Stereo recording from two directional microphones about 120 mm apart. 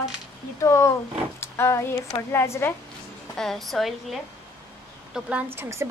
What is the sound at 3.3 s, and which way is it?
Speech, 5° left (ahead or behind).